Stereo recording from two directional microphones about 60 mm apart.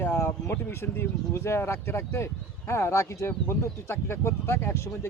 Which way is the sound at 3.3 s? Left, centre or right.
Left.